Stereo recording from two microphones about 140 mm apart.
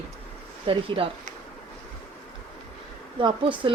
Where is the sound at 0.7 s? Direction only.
45° right (ahead or behind).